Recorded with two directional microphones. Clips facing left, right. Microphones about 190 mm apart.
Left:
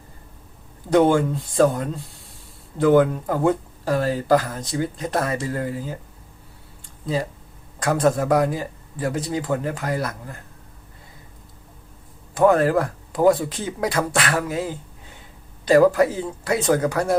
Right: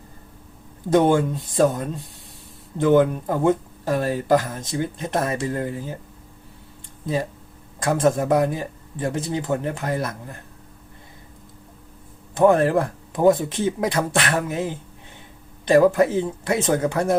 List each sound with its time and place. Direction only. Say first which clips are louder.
0.9 s speech: left 1 dB; 20° right (ahead or behind)
7.9 s speech: even; 25° right (ahead or behind)
12.4 s speech: even; 25° right (ahead or behind)